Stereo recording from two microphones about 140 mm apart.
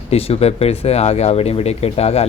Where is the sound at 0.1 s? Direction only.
45° left (ahead or behind).